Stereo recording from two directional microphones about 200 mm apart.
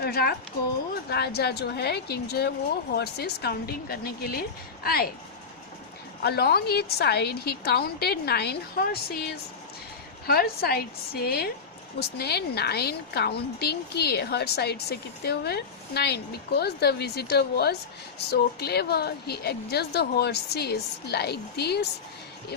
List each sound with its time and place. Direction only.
0.0 s a woman's voice: 50° left (ahead or behind)
6.2 s a woman's voice: 50° left (ahead or behind)